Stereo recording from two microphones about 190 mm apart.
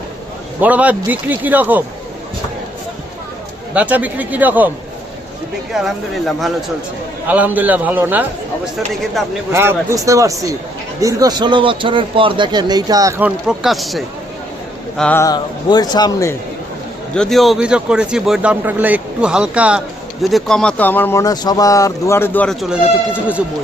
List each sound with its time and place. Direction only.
0.6 s a man's voice: 10° right (ahead or behind)
3.8 s a man's voice: 10° right (ahead or behind)
5.7 s a man's voice: centre (ahead or behind)
9.5 s a man's voice: 15° right (ahead or behind); by 15.2 s 5° left (ahead or behind)
15.2 s speech: 20° left (ahead or behind)
17.2 s speech: centre (ahead or behind)
22.7 s speech: 5° right (ahead or behind)